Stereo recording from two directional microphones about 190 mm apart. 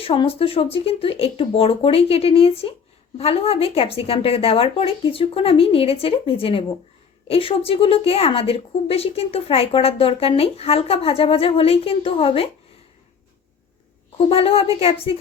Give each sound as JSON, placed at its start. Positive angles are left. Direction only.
{"t": 0.0, "sound": "a woman's voice", "side_deg": 30}
{"t": 14.2, "sound": "a woman's voice", "side_deg": 30}